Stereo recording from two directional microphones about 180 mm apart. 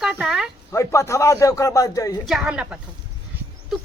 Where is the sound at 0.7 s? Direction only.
15° left (ahead or behind).